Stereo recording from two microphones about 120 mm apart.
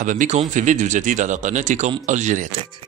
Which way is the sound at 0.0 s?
90° right.